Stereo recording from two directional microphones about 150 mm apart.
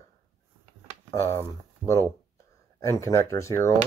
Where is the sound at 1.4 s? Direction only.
20° left (ahead or behind).